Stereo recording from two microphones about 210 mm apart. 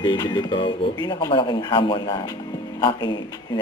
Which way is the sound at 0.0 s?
20° left (ahead or behind).